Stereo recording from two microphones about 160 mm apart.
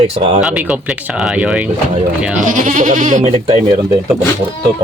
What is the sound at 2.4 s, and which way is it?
Speech, 50° right (ahead or behind).